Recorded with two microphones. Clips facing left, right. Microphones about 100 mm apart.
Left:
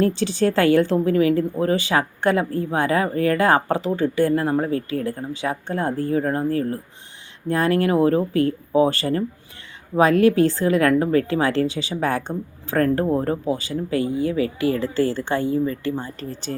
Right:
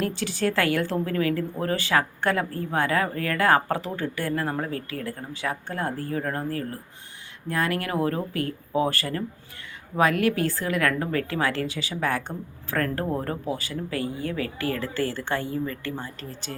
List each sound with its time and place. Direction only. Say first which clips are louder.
0.0 s a woman's voice: left 7 dB; 25° left (ahead or behind)